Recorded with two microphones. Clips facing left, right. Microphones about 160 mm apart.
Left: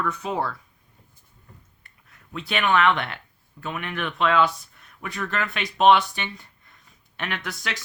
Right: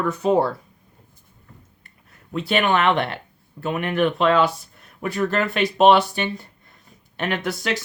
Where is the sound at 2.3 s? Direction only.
35° right (ahead or behind).